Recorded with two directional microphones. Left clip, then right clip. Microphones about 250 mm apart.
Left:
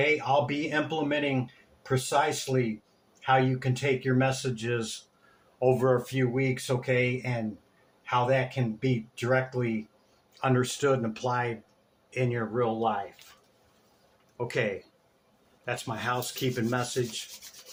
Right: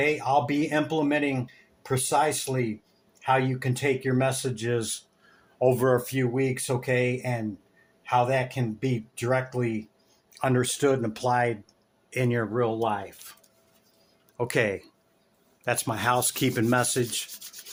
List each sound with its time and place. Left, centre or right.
0.0 s speech: right
14.3 s speech: right